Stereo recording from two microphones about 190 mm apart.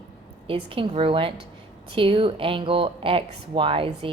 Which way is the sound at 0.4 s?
30° right (ahead or behind).